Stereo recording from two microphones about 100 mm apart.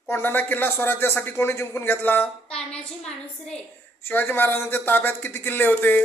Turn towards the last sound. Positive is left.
turn(degrees=20)  # may be behind; listen again after turning